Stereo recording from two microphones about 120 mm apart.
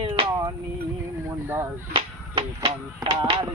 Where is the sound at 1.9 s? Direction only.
45° right (ahead or behind).